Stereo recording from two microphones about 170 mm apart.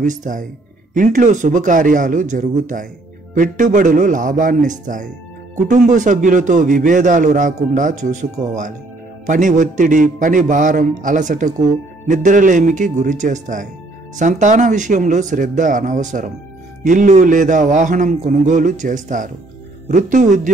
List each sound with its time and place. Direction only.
0.0 s a man's voice: 50° right (ahead or behind)